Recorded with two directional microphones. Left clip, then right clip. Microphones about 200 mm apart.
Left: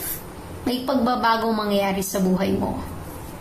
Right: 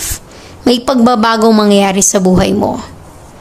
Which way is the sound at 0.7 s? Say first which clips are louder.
Right 12 dB; 45° right (ahead or behind).